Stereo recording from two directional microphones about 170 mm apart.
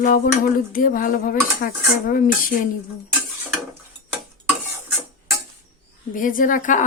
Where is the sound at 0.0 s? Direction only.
50° left (ahead or behind).